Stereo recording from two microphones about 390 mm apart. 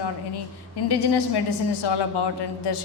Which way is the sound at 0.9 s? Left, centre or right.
Left.